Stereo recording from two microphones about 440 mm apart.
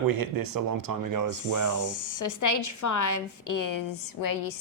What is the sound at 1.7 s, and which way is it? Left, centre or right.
A woman's voice, left.